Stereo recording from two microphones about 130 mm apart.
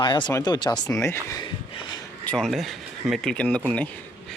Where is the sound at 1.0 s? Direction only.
20° left (ahead or behind).